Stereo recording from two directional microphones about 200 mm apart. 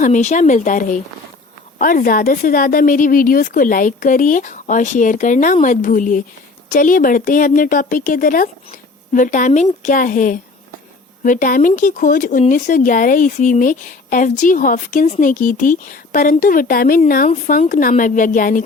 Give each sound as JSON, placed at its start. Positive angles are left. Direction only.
{"t": 0.0, "sound": "speech", "side_deg": 35}